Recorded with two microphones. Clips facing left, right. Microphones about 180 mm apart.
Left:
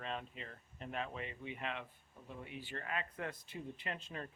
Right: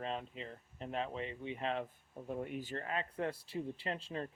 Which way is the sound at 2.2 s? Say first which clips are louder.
Right 8 dB; 45° right (ahead or behind).